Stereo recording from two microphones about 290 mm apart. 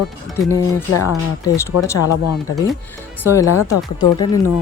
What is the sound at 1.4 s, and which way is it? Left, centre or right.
Speech, centre.